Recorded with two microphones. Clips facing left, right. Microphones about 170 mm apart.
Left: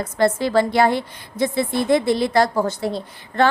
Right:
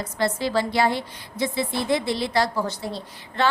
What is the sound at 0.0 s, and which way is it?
A woman's voice, 50° left (ahead or behind).